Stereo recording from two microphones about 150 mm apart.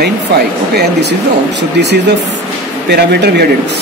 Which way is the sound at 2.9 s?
90° right.